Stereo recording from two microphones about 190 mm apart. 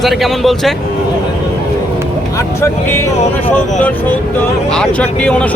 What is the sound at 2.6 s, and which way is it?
Speech, 10° left (ahead or behind).